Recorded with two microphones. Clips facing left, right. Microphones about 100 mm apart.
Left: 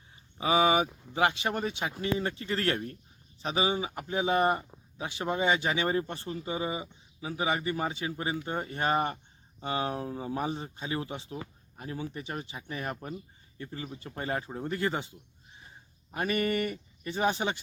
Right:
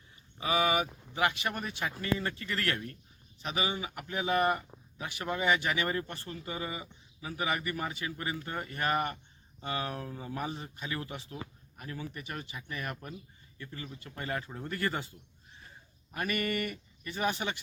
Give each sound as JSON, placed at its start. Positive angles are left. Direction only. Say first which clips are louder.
{"t": 0.3, "sound": "speech", "louder": "left 4 dB", "side_deg": 25}
{"t": 13.8, "sound": "speech", "louder": "left 4 dB", "side_deg": 20}